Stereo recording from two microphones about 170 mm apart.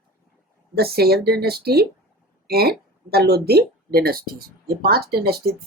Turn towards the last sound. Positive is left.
turn(degrees=-65)  # may be behind; listen again after turning